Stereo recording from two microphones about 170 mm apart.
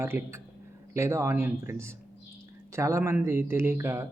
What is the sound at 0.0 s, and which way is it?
A man's voice, 15° right (ahead or behind).